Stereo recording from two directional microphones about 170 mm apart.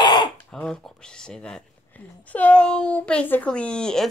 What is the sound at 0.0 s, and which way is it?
Throat clearing, 25° left (ahead or behind).